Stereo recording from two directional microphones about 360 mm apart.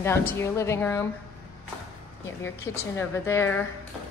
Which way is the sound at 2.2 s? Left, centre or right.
Centre.